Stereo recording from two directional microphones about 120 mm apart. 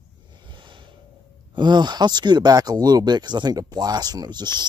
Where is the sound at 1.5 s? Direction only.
40° right (ahead or behind).